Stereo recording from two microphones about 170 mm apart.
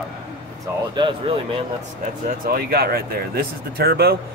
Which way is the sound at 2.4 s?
60° right (ahead or behind).